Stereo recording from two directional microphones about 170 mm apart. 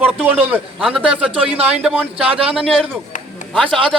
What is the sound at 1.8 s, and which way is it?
Speech, 10° right (ahead or behind).